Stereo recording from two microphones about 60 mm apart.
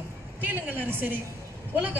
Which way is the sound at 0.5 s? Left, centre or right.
Right.